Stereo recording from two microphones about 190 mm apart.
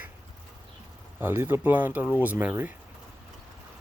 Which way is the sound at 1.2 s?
10° right (ahead or behind).